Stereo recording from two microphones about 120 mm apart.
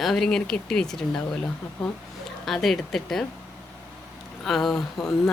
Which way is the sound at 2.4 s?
Centre (ahead or behind).